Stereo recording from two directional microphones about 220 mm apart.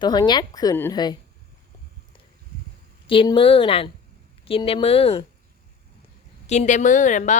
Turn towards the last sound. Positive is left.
turn(degrees=35)  # may be behind; listen again after turning